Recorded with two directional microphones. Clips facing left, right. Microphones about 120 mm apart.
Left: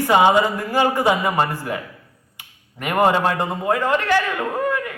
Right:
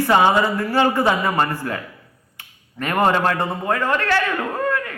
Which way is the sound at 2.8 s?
15° left (ahead or behind).